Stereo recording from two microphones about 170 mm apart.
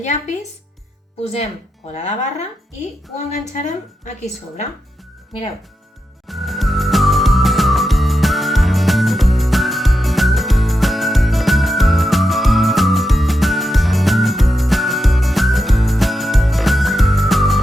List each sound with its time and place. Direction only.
0.0 s a woman's voice: 45° left (ahead or behind)
3.5 s a woman's voice: 45° left (ahead or behind)
6.2 s music: centre (ahead or behind)